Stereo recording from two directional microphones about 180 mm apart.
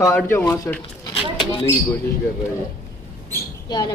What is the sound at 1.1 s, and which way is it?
Bird, 30° left (ahead or behind).